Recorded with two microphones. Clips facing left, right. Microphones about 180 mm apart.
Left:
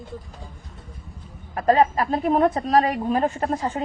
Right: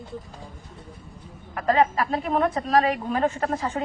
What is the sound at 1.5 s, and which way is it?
A woman's voice, 35° left (ahead or behind).